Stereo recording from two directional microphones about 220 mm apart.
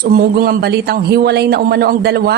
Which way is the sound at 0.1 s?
45° right (ahead or behind).